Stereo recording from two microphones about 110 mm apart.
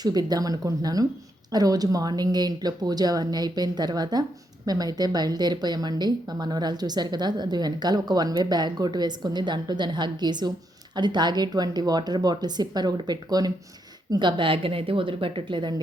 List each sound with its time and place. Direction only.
0.0 s speech: 40° right (ahead or behind)